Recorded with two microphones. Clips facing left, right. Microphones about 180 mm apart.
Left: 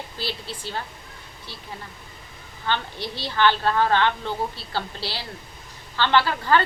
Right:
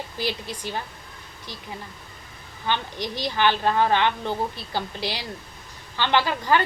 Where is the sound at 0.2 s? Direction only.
15° right (ahead or behind).